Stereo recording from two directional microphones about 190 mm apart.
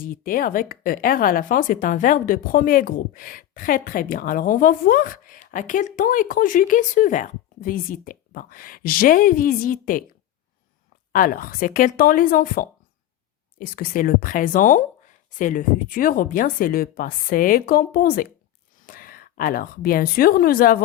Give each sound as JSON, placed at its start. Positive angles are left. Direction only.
{"t": 0.0, "sound": "speech", "side_deg": 50}
{"t": 11.1, "sound": "a woman's voice", "side_deg": 45}